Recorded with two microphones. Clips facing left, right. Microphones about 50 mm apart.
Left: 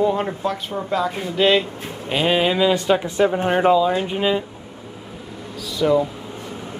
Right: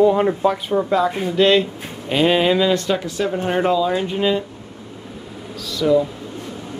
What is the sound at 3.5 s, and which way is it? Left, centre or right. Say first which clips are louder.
Speech: right 1 dB; centre.